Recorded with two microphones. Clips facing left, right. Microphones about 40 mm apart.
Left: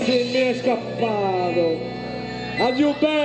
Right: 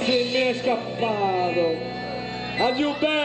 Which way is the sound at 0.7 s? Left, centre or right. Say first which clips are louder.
Left 2 dB; centre.